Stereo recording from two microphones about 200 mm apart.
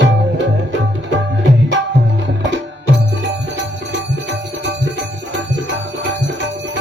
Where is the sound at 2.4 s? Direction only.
60° right (ahead or behind).